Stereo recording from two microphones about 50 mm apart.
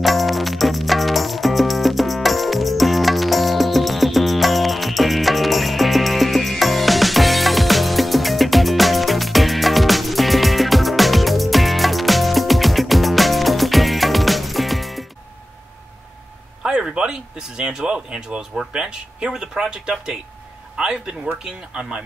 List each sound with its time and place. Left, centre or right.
0.0 s music: centre
16.6 s a sound: centre
18.7 s speech: centre